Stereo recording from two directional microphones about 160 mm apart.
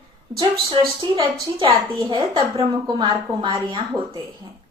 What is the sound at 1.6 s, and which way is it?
A woman's voice, 25° right (ahead or behind).